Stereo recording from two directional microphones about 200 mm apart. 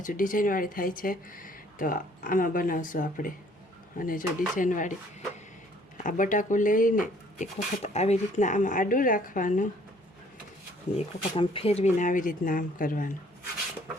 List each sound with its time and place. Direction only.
0.0 s speech: 45° left (ahead or behind)
6.0 s speech: 40° left (ahead or behind)
10.9 s speech: 30° left (ahead or behind); by 13.1 s 45° left (ahead or behind)